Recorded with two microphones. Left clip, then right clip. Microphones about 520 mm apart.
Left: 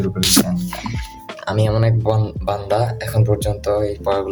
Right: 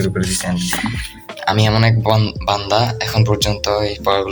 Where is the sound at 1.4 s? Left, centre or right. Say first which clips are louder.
Right 4 dB; left.